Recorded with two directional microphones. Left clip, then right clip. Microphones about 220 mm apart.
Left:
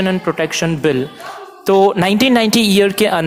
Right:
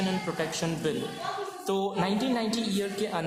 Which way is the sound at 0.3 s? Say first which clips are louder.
Left 14 dB; 30° left (ahead or behind).